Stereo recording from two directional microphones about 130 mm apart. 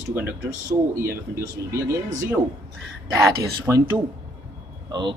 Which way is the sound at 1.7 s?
20° right (ahead or behind).